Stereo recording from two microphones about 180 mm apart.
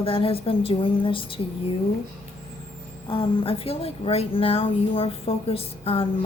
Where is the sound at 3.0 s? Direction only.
30° left (ahead or behind).